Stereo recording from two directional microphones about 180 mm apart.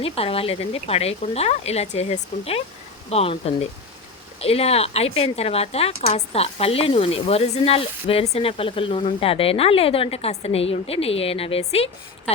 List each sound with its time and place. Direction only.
0.0 s speech: 30° left (ahead or behind)